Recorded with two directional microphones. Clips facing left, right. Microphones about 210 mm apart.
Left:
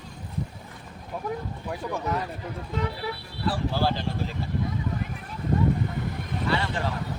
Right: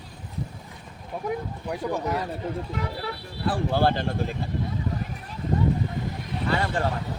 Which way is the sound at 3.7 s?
55° right (ahead or behind).